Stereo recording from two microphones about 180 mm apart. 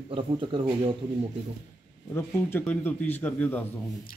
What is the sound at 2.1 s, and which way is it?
A man's voice, 10° left (ahead or behind).